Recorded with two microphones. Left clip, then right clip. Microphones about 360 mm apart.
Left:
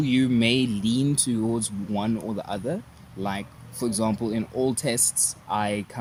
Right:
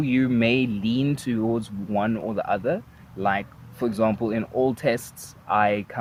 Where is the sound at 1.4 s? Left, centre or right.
Right.